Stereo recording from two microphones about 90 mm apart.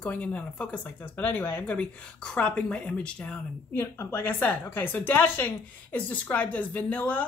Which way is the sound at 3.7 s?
25° left (ahead or behind).